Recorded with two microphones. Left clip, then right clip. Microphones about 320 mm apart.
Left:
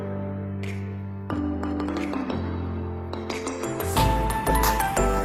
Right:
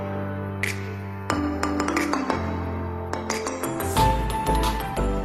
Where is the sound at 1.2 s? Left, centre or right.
Right.